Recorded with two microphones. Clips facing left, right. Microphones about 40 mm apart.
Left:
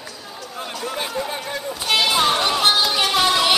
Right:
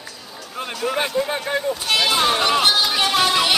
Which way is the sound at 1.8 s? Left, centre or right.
Centre.